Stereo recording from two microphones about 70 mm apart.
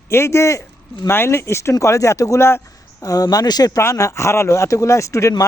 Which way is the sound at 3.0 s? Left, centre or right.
Left.